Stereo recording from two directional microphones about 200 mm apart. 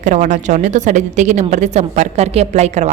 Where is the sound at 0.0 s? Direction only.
40° right (ahead or behind).